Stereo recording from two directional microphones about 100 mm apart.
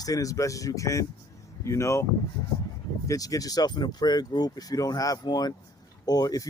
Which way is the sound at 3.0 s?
35° left (ahead or behind).